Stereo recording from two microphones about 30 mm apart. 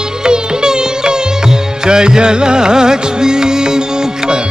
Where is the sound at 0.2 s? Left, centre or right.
Right.